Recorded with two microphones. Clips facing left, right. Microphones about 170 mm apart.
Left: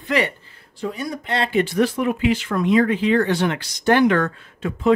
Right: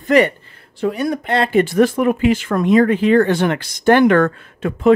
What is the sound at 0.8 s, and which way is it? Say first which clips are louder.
Speech: right 8 dB; 65° right (ahead or behind).